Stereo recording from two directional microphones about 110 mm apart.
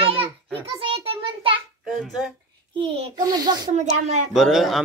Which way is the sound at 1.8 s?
5° right (ahead or behind).